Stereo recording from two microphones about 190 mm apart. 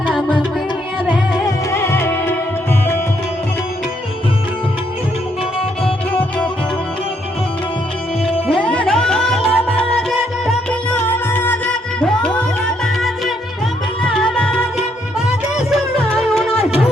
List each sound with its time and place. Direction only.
0.1 s music: 5° left (ahead or behind)
1.5 s music: 15° left (ahead or behind)
8.4 s music: 5° left (ahead or behind)
15.5 s music: 30° left (ahead or behind)